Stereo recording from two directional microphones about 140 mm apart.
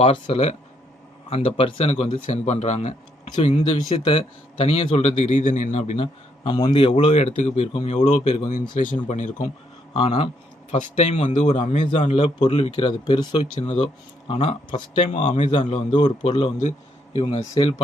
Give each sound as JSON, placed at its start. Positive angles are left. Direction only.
{"t": 0.0, "sound": "a man's voice", "side_deg": 50}
{"t": 3.4, "sound": "a man's voice", "side_deg": 45}
{"t": 6.0, "sound": "a man's voice", "side_deg": 35}
{"t": 6.9, "sound": "a man's voice", "side_deg": 55}
{"t": 7.7, "sound": "speech", "side_deg": 40}
{"t": 7.9, "sound": "a man's voice", "side_deg": 55}
{"t": 8.7, "sound": "speech", "side_deg": 70}
{"t": 9.0, "sound": "a man's voice", "side_deg": 60}
{"t": 10.0, "sound": "a man's voice", "side_deg": 50}
{"t": 12.0, "sound": "speech", "side_deg": 40}
{"t": 12.5, "sound": "a man's voice", "side_deg": 50}
{"t": 12.8, "sound": "speech", "side_deg": 35}
{"t": 13.6, "sound": "speech", "side_deg": 50}